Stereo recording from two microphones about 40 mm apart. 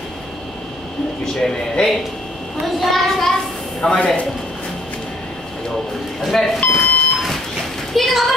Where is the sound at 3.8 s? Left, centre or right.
Centre.